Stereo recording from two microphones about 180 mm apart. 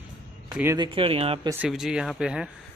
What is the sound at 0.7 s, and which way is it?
Speech, 30° right (ahead or behind).